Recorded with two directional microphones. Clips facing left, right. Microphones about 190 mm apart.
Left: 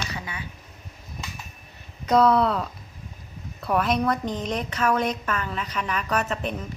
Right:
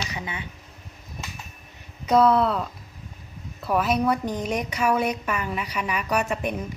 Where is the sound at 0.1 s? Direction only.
20° right (ahead or behind).